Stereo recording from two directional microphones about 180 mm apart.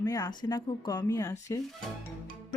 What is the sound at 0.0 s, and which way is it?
Speech, 20° left (ahead or behind).